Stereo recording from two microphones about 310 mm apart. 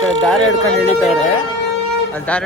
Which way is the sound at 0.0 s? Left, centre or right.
Centre.